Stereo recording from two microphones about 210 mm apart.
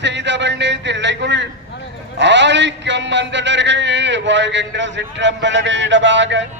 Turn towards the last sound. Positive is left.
turn(degrees=-60)  # may be behind; listen again after turning